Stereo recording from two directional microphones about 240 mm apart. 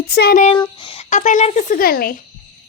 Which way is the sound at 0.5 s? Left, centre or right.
Centre.